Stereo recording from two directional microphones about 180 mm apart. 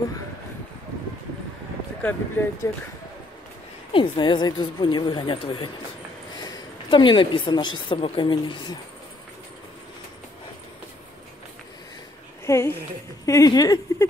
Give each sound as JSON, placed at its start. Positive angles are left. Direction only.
{"t": 2.0, "sound": "speech", "side_deg": 10}
{"t": 3.9, "sound": "a woman's voice", "side_deg": 25}
{"t": 12.4, "sound": "a woman's voice", "side_deg": 15}